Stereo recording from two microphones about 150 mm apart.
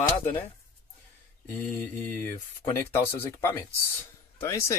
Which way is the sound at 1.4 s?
10° left (ahead or behind).